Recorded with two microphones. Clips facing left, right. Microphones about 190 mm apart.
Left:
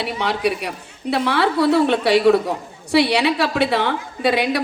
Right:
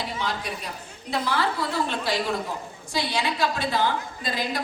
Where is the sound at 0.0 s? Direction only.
70° left (ahead or behind).